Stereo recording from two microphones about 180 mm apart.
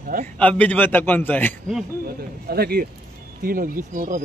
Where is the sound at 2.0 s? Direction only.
60° right (ahead or behind).